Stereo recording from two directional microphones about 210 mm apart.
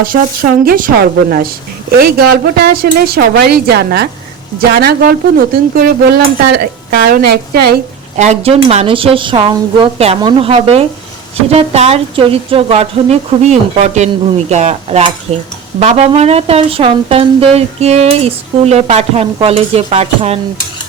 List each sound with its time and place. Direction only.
0.0 s speech: 40° right (ahead or behind)
2.6 s speech: 50° right (ahead or behind)
8.1 s a woman's voice: 35° right (ahead or behind)